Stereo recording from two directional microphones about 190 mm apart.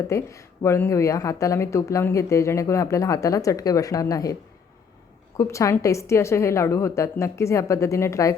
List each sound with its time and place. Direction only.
0.1 s speech: 15° left (ahead or behind)
5.4 s speech: 15° left (ahead or behind)